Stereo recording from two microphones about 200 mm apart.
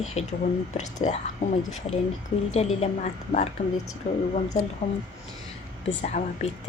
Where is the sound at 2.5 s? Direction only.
30° left (ahead or behind).